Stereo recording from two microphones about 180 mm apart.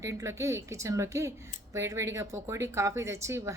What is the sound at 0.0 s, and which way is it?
Speech, 15° right (ahead or behind).